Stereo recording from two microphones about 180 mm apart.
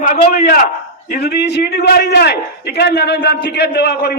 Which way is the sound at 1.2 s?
65° left (ahead or behind).